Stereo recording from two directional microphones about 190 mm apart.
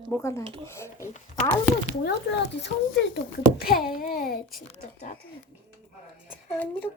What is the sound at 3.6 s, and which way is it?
Speech, 50° left (ahead or behind).